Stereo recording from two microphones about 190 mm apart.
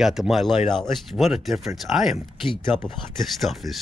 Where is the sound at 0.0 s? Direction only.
Centre (ahead or behind).